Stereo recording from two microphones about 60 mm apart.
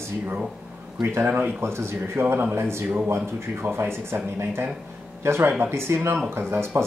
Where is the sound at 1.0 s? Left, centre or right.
Right.